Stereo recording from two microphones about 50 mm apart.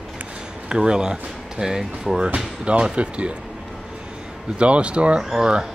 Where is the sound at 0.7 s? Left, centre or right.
Centre.